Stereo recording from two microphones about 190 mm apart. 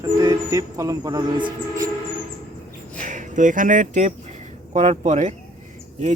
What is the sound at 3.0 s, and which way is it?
Speech, 40° right (ahead or behind).